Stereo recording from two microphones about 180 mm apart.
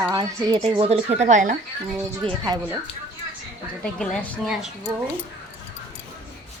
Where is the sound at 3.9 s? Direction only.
Centre (ahead or behind).